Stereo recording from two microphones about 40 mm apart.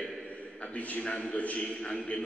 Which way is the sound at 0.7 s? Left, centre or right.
Left.